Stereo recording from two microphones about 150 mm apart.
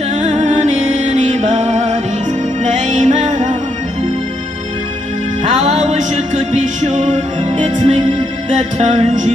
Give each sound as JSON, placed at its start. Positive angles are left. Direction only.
{"t": 0.1, "sound": "music", "side_deg": -50}
{"t": 5.4, "sound": "music", "side_deg": -45}